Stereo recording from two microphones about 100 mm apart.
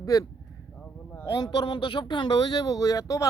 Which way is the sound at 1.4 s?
50° left (ahead or behind).